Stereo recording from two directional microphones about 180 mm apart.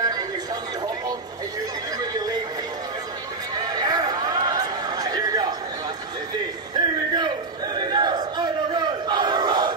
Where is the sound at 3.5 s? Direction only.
20° right (ahead or behind).